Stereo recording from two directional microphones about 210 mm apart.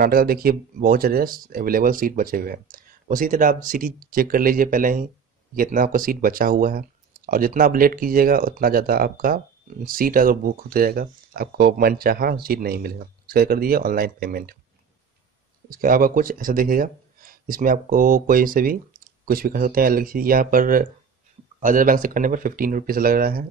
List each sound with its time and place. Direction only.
0.0 s speech: 45° right (ahead or behind)
15.7 s speech: 40° right (ahead or behind)